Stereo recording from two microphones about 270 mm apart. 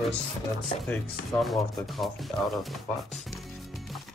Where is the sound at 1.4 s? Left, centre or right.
Centre.